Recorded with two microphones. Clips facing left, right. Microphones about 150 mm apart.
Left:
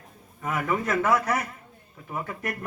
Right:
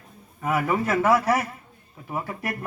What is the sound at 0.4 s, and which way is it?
A man's voice, 30° right (ahead or behind).